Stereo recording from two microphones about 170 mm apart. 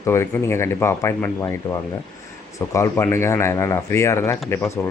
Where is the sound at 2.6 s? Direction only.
15° left (ahead or behind).